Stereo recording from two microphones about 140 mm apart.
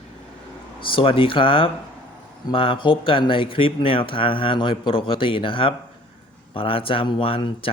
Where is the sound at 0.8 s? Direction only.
35° left (ahead or behind).